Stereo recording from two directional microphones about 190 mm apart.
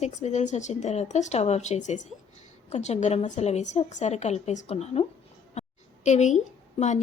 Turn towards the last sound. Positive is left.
turn(degrees=35)  # may be behind; listen again after turning